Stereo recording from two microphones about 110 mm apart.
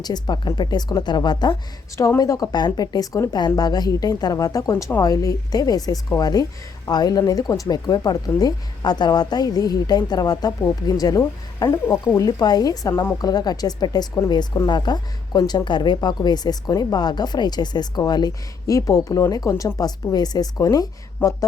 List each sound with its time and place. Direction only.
0.0 s speech: 40° left (ahead or behind)
2.0 s speech: 30° left (ahead or behind)
4.7 s speech: 25° left (ahead or behind)
21.2 s speech: 20° left (ahead or behind)